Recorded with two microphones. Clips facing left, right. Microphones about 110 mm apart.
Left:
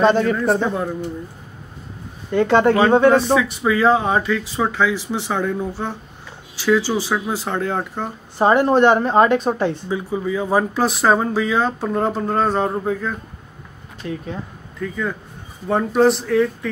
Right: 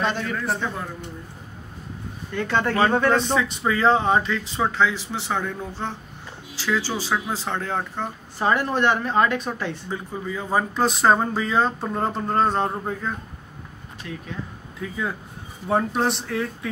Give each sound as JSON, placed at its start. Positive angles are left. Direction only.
{"t": 0.0, "sound": "speech", "side_deg": 40}
{"t": 2.4, "sound": "speech", "side_deg": 25}
{"t": 8.4, "sound": "speech", "side_deg": 30}
{"t": 9.8, "sound": "speech", "side_deg": 5}
{"t": 14.0, "sound": "speech", "side_deg": 35}
{"t": 14.8, "sound": "speech", "side_deg": -10}